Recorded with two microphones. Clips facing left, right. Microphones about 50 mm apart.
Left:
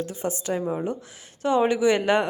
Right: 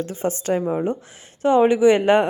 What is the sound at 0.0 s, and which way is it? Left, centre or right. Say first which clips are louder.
Speech: right 4 dB; right.